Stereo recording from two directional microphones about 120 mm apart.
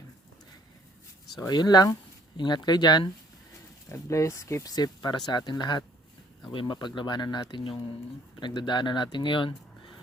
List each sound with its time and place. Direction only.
1.4 s speech: 35° left (ahead or behind)
3.8 s speech: 25° left (ahead or behind); by 9.6 s 40° left (ahead or behind)